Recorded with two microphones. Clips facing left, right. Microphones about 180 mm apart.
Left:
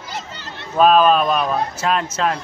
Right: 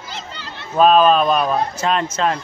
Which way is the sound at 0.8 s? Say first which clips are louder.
Right 1 dB; 5° left (ahead or behind).